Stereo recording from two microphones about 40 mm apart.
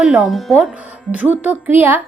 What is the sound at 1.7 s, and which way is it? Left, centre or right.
Music, right.